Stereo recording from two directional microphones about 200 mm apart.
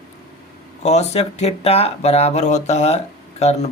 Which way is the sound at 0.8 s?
35° left (ahead or behind).